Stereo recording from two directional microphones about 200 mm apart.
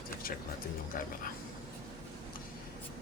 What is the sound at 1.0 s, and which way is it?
Speech, 45° left (ahead or behind).